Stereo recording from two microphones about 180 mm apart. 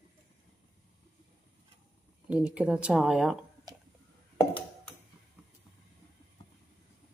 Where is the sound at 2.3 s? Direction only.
5° right (ahead or behind).